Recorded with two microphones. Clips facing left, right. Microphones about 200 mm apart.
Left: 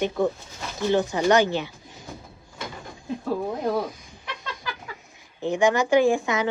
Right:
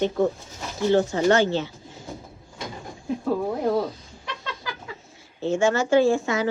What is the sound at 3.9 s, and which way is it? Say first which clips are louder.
Bird: right 2 dB; 15° left (ahead or behind).